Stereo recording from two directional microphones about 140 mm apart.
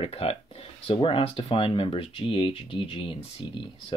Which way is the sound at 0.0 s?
45° left (ahead or behind).